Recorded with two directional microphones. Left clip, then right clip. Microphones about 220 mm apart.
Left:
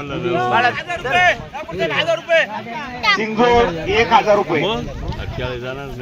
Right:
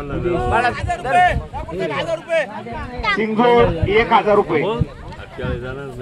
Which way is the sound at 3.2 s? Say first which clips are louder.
Right 3 dB; 50° right (ahead or behind).